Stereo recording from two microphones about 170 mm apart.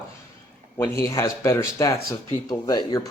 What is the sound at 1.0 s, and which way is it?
Speech, 20° left (ahead or behind).